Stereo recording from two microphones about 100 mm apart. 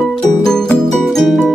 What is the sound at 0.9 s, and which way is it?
Music, 5° left (ahead or behind).